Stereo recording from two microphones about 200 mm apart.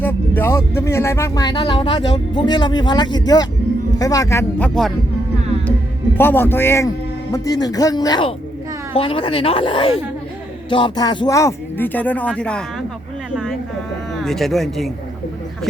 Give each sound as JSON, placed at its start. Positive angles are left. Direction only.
{"t": 0.0, "sound": "music", "side_deg": 10}
{"t": 0.8, "sound": "speech", "side_deg": 15}
{"t": 6.1, "sound": "speech", "side_deg": 10}
{"t": 13.3, "sound": "a sound", "side_deg": -5}
{"t": 14.2, "sound": "speech", "side_deg": 0}